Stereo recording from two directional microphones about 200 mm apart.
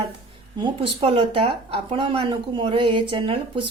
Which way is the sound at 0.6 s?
30° right (ahead or behind).